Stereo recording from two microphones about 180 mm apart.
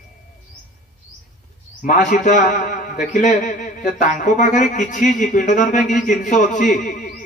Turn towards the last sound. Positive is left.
turn(degrees=45)  # may be behind; listen again after turning